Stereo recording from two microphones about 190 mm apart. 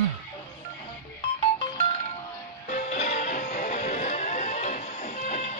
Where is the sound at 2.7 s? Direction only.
40° left (ahead or behind).